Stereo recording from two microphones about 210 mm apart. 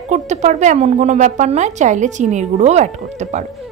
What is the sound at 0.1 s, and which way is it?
A woman's voice, 35° right (ahead or behind).